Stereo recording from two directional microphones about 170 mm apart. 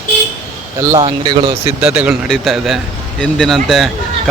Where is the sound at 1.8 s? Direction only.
5° right (ahead or behind).